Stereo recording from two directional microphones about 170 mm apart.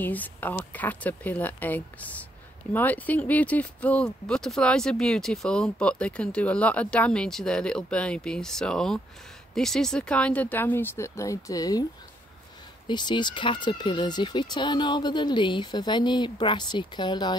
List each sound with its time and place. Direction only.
0.0 s speech: 10° left (ahead or behind)
12.8 s speech: 25° left (ahead or behind)